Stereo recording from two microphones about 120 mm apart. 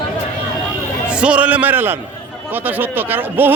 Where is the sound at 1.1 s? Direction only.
10° right (ahead or behind).